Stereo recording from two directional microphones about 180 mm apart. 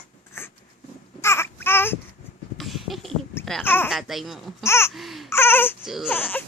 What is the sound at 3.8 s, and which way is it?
Speech, centre (ahead or behind).